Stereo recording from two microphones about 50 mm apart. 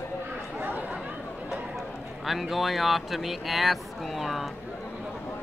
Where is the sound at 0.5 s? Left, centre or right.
Right.